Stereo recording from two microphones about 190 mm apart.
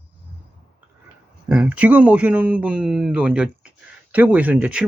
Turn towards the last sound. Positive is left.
turn(degrees=-5)  # may be behind; listen again after turning